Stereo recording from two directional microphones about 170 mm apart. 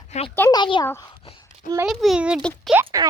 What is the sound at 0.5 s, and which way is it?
Speech, 25° left (ahead or behind).